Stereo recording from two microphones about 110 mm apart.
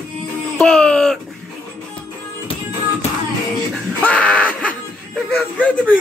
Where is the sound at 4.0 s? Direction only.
10° left (ahead or behind).